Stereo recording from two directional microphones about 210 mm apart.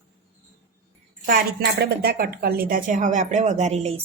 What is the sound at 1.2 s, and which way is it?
A woman's voice, 45° right (ahead or behind).